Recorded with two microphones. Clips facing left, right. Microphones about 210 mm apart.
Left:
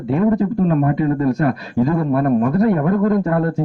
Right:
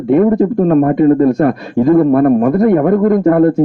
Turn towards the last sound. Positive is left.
turn(degrees=-50)  # may be behind; listen again after turning